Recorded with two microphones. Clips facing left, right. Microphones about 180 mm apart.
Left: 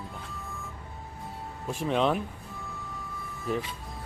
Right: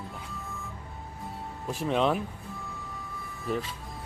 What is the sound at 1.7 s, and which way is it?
Speech, centre (ahead or behind).